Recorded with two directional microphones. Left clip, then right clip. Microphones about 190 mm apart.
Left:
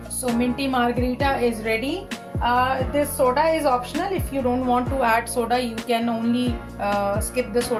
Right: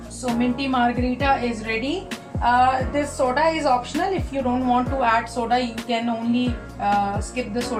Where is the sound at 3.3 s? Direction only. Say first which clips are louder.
Right 2 dB; 50° left (ahead or behind).